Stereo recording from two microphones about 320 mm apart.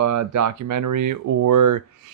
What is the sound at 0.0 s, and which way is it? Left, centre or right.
Speech, right.